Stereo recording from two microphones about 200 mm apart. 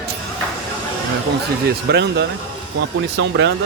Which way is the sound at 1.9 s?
55° right (ahead or behind).